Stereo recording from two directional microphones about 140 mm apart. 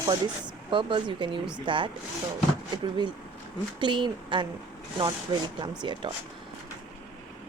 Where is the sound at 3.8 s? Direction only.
35° right (ahead or behind).